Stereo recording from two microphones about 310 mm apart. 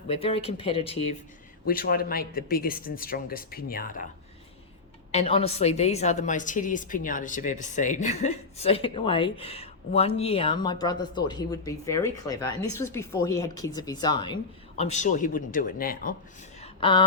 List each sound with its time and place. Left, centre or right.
0.1 s a woman's voice: centre
5.1 s a woman's voice: centre
16.6 s a sound: centre